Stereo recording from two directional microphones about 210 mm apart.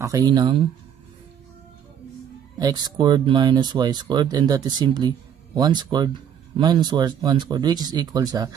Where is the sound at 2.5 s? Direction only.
20° right (ahead or behind).